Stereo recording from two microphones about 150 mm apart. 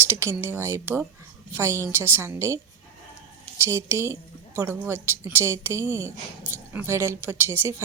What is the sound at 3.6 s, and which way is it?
A woman's voice, 20° right (ahead or behind).